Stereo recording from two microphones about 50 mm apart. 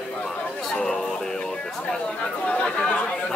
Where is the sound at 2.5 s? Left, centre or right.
Centre.